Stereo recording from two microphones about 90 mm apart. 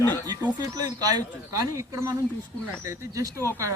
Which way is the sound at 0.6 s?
45° right (ahead or behind).